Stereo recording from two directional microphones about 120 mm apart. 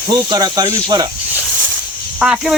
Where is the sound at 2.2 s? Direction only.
5° right (ahead or behind).